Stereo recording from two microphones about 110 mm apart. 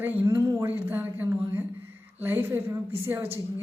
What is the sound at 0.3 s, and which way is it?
Speech, 25° right (ahead or behind).